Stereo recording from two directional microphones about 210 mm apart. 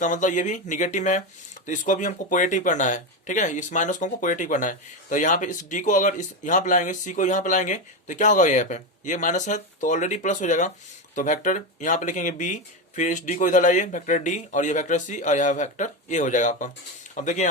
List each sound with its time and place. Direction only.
0.0 s speech: 35° left (ahead or behind)